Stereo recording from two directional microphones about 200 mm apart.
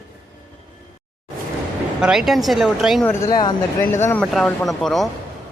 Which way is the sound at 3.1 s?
15° left (ahead or behind).